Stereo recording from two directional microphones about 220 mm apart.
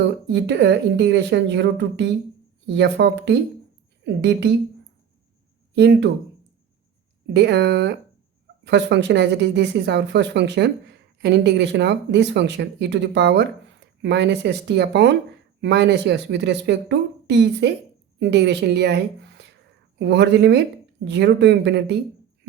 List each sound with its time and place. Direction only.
0.0 s speech: 55° right (ahead or behind)
5.7 s speech: 50° right (ahead or behind)
7.3 s speech: 50° right (ahead or behind)